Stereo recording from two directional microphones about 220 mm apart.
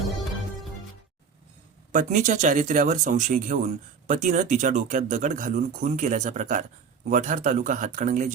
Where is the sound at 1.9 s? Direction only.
35° right (ahead or behind).